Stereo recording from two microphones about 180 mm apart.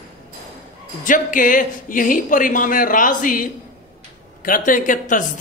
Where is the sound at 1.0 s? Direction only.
45° left (ahead or behind).